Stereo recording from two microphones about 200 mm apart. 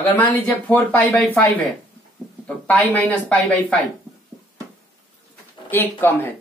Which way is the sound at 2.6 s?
5° left (ahead or behind).